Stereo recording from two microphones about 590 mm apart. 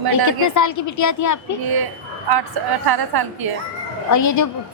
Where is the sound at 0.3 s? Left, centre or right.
Left.